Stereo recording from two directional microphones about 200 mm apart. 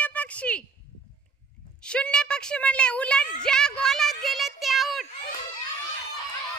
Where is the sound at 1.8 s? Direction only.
5° left (ahead or behind).